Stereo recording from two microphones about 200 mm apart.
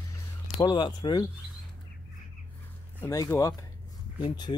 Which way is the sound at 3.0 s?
15° left (ahead or behind).